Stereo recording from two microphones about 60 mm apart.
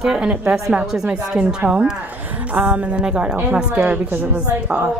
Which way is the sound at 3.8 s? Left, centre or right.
Right.